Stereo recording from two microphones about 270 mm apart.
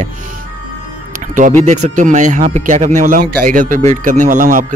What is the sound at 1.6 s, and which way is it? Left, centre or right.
Speech, right.